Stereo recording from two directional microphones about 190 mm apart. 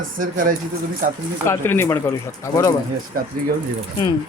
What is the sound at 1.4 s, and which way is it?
Speech, 15° left (ahead or behind).